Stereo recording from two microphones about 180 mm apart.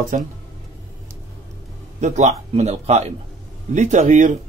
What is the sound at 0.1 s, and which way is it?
Speech, 45° right (ahead or behind).